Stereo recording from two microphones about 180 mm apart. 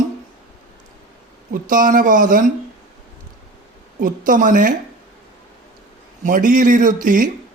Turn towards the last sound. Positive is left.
turn(degrees=-50)  # may be behind; listen again after turning